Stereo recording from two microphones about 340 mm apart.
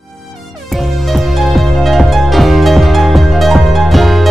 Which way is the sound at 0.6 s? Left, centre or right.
Centre.